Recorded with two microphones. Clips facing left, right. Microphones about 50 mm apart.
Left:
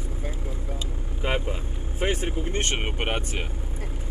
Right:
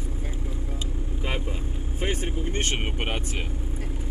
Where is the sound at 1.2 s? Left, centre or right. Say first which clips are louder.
Left 5 dB; left.